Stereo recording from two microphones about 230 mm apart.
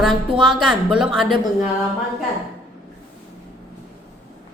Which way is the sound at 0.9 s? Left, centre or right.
Centre.